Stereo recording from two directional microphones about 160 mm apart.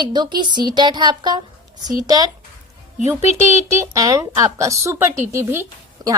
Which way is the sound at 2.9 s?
45° left (ahead or behind).